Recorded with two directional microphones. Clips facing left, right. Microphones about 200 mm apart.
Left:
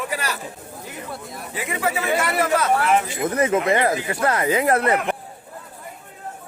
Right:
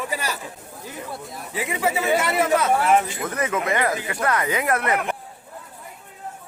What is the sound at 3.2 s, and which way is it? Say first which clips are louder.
A man's voice: left 5 dB; 25° left (ahead or behind).